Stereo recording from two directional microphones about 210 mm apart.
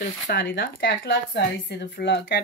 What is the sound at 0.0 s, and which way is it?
Speech, 55° left (ahead or behind).